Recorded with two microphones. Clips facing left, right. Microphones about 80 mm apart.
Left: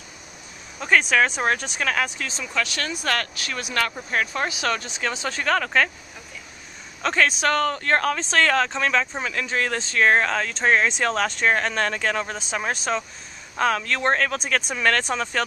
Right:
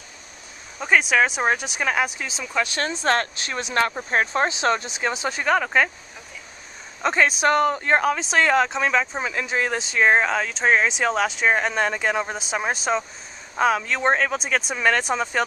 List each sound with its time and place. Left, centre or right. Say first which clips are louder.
0.7 s speech: even; centre
7.0 s speech: right 1 dB; centre